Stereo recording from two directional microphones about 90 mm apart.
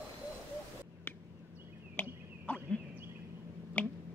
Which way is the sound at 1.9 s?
20° left (ahead or behind).